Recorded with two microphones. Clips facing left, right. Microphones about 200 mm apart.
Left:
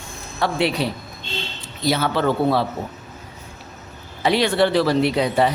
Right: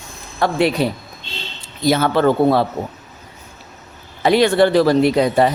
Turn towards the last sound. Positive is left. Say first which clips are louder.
# right 4 dB
turn(degrees=-45)  # may be behind; listen again after turning